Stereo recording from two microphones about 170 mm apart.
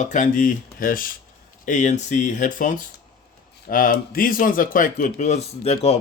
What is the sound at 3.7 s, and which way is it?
Speech, 55° left (ahead or behind).